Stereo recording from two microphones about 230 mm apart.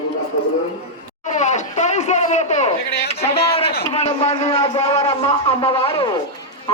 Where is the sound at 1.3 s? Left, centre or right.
Left.